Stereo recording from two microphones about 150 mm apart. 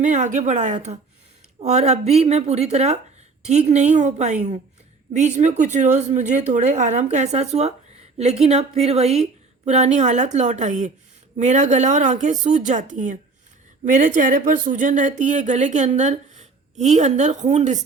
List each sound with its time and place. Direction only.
0.0 s speech: 55° right (ahead or behind)